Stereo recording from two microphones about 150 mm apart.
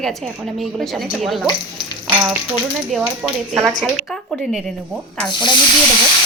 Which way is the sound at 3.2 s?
5° right (ahead or behind).